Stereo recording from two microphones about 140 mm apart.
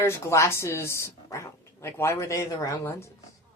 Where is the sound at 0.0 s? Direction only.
20° left (ahead or behind).